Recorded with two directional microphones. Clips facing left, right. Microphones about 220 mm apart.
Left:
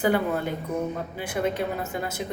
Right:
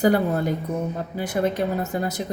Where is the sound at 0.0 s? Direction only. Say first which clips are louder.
Right 4 dB; 40° right (ahead or behind).